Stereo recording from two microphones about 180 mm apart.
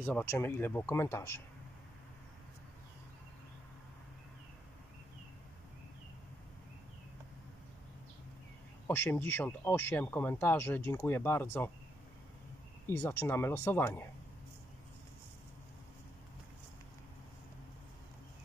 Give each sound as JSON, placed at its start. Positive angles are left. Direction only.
{"t": 0.0, "sound": "speech", "side_deg": 10}
{"t": 8.8, "sound": "speech", "side_deg": 10}
{"t": 12.8, "sound": "speech", "side_deg": 15}